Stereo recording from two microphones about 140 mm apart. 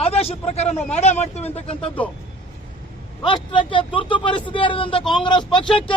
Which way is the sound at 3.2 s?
35° left (ahead or behind).